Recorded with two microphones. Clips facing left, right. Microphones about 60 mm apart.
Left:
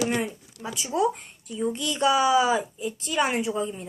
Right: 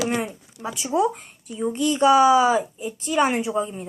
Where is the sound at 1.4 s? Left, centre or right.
Right.